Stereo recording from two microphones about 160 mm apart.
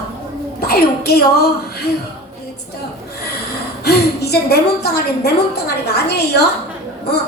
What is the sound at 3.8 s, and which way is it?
A woman's voice, 90° left.